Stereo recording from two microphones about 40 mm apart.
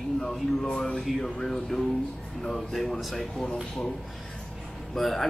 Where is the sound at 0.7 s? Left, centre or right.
Centre.